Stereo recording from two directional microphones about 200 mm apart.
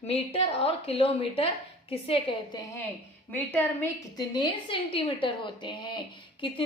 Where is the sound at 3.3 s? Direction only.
10° left (ahead or behind).